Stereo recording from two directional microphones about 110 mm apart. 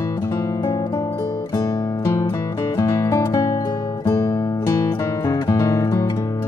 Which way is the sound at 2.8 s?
30° left (ahead or behind).